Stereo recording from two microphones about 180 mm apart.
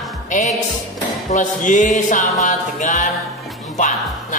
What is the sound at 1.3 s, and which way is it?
Speech, 45° left (ahead or behind).